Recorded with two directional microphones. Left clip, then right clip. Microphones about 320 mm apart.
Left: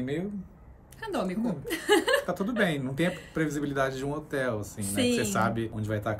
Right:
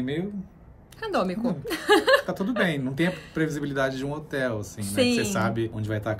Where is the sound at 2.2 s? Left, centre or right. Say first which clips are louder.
Right 2 dB; centre.